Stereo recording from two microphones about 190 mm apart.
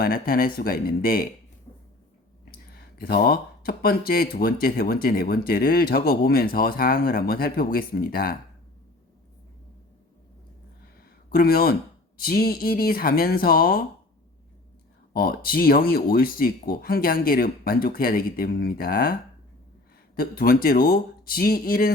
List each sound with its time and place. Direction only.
0.0 s speech: 50° left (ahead or behind)
2.7 s speech: 50° left (ahead or behind)
11.3 s speech: 50° left (ahead or behind)
15.1 s speech: 50° left (ahead or behind)
20.1 s speech: 50° left (ahead or behind)